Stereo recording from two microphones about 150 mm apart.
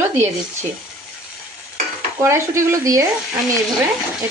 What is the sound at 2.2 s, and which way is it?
Speech, 20° right (ahead or behind).